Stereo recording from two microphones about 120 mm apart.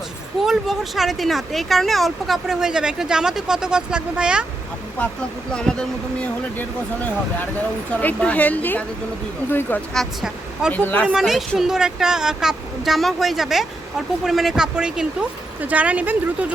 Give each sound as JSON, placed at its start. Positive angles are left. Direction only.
{"t": 0.4, "sound": "speech", "side_deg": 0}
{"t": 5.5, "sound": "speech", "side_deg": 5}
{"t": 9.9, "sound": "speech", "side_deg": 0}
{"t": 10.7, "sound": "speech", "side_deg": 15}
{"t": 11.1, "sound": "speech", "side_deg": -5}